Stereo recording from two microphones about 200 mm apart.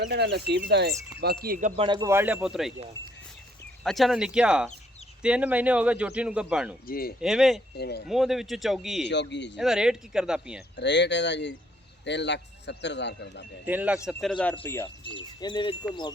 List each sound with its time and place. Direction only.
0.1 s speech: 55° right (ahead or behind)
1.7 s speech: 25° right (ahead or behind); by 2.7 s centre (ahead or behind)
3.8 s a man's voice: centre (ahead or behind)
6.8 s speech: 50° left (ahead or behind)
7.2 s a man's voice: centre (ahead or behind)
7.8 s speech: 55° left (ahead or behind)
8.0 s a man's voice: centre (ahead or behind)
9.0 s speech: 60° left (ahead or behind)
9.6 s a man's voice: centre (ahead or behind)
10.8 s speech: 60° left (ahead or behind)
13.7 s a man's voice: 5° right (ahead or behind); by 14.8 s 10° left (ahead or behind)
15.0 s wind chime: 25° left (ahead or behind)